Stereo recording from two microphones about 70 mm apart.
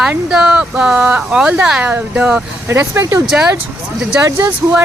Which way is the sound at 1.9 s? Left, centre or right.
Right.